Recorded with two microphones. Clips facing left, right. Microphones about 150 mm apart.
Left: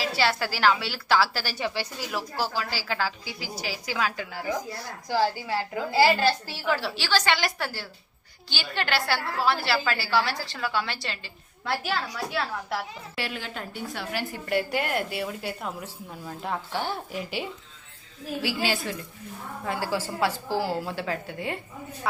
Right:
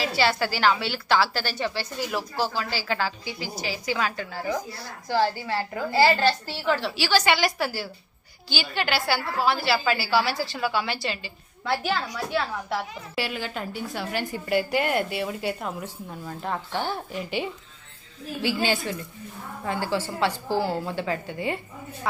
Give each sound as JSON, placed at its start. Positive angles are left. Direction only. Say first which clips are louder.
{"t": 0.0, "sound": "a woman's voice", "louder": "right 2 dB", "side_deg": 0}
{"t": 6.9, "sound": "a woman's voice", "louder": "right 3 dB", "side_deg": -10}